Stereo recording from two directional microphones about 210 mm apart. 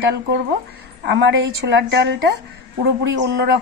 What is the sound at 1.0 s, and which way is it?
A woman's voice, 55° right (ahead or behind).